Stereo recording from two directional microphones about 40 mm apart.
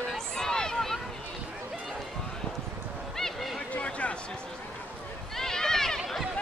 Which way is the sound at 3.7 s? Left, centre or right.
Left.